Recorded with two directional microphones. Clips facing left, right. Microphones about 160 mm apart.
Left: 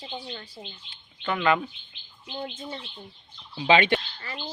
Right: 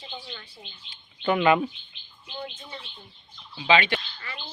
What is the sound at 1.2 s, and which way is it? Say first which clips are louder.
Speech: right 3 dB; 15° right (ahead or behind).